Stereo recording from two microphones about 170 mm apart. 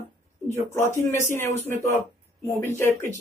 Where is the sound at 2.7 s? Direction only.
15° left (ahead or behind).